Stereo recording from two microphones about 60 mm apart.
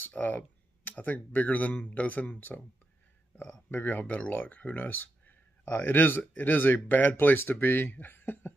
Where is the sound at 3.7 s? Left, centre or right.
Left.